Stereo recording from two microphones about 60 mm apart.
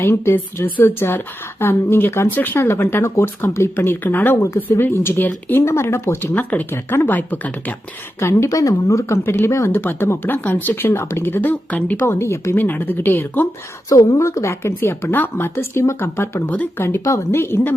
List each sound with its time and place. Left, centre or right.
0.0 s speech: left
2.6 s speech: left
5.5 s speech: left
6.3 s speech: left
6.7 s speech: left
8.2 s speech: left
8.4 s speech: left
9.6 s speech: left
12.0 s speech: left
12.5 s speech: left
13.9 s a woman's voice: left
14.2 s speech: left
14.8 s speech: left